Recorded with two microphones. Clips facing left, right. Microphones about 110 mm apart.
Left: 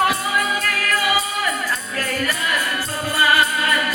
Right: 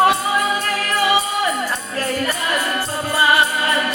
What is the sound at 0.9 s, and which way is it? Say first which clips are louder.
Music: right 4 dB; 25° right (ahead or behind).